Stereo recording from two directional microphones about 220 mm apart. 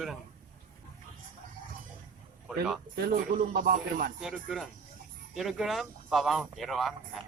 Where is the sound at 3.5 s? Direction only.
40° right (ahead or behind).